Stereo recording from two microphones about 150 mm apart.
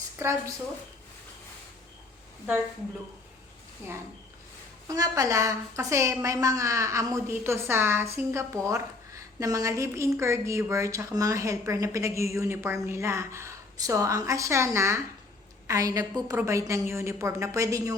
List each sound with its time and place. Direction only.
0.2 s a woman's voice: 20° right (ahead or behind)
4.9 s a woman's voice: 20° right (ahead or behind)